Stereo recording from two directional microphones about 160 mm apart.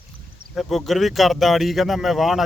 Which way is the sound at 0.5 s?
Centre (ahead or behind).